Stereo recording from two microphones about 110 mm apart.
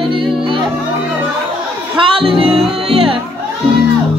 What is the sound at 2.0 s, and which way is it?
Music, 50° right (ahead or behind).